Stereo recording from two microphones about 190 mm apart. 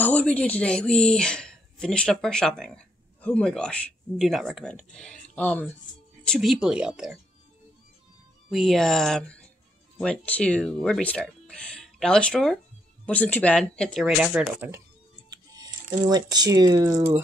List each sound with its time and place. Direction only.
0.0 s speech: 5° left (ahead or behind)
8.5 s speech: centre (ahead or behind)
15.3 s speech: 20° right (ahead or behind)